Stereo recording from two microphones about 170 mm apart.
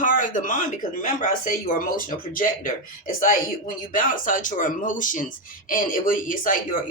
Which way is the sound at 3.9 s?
50° left (ahead or behind).